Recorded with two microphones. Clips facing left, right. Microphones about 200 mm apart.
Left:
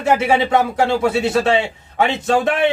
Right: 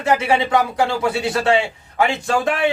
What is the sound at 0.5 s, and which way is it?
A man's voice, 25° left (ahead or behind).